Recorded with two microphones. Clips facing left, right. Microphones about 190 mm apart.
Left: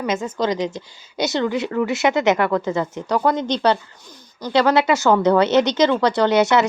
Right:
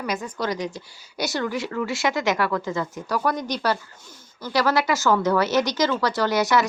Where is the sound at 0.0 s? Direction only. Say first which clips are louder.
Left 6 dB; 20° left (ahead or behind).